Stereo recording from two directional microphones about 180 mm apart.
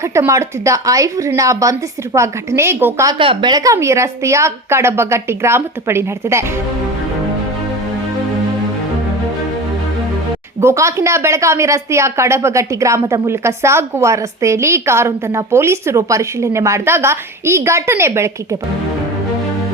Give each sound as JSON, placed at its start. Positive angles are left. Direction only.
{"t": 0.0, "sound": "a woman's voice", "side_deg": -15}
{"t": 3.2, "sound": "a woman's voice", "side_deg": -25}
{"t": 10.6, "sound": "a woman's voice", "side_deg": -15}